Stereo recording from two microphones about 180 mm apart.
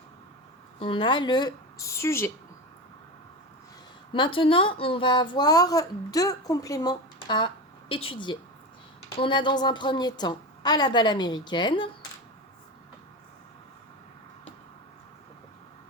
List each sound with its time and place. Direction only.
0.8 s a woman's voice: 30° left (ahead or behind)
4.1 s a woman's voice: 30° left (ahead or behind)